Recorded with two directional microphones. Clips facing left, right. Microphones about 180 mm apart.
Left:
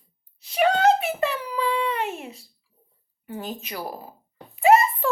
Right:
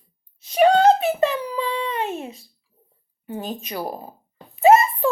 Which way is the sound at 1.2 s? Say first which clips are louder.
Right 4 dB; 20° right (ahead or behind).